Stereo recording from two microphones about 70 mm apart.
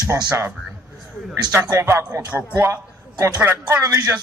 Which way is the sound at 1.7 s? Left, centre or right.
Right.